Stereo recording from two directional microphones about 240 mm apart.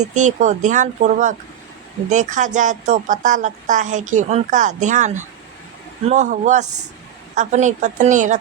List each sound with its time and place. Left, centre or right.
0.0 s a woman's voice: right